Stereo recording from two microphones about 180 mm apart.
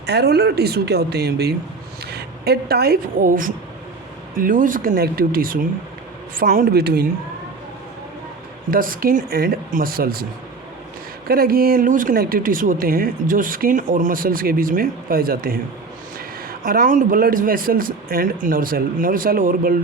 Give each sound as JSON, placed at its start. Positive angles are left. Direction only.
{"t": 0.0, "sound": "a woman's voice", "side_deg": -65}
{"t": 8.7, "sound": "speech", "side_deg": -50}
{"t": 11.3, "sound": "speech", "side_deg": -55}